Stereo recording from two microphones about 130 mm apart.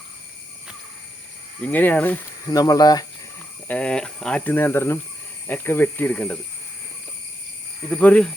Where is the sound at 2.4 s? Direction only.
30° left (ahead or behind).